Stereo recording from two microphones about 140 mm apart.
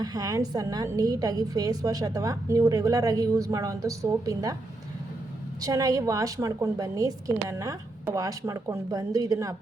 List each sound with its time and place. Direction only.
0.0 s a woman's voice: 25° right (ahead or behind)
5.6 s a woman's voice: 25° right (ahead or behind)